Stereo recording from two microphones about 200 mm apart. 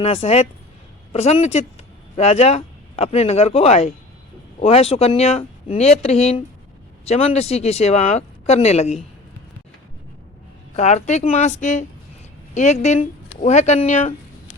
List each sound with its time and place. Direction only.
0.0 s speech: 30° left (ahead or behind)
10.8 s speech: 35° left (ahead or behind)